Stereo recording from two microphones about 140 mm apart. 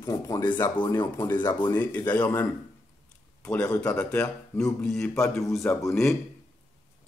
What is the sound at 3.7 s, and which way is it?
Speech, 25° left (ahead or behind).